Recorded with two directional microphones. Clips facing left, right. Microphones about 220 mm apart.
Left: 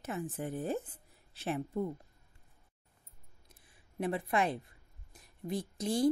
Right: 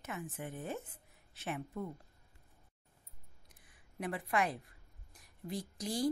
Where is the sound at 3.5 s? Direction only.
25° left (ahead or behind).